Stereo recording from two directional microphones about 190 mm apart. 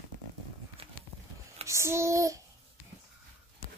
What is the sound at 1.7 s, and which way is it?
Child singing, 15° right (ahead or behind).